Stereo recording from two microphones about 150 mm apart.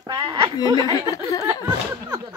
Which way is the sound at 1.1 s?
20° left (ahead or behind).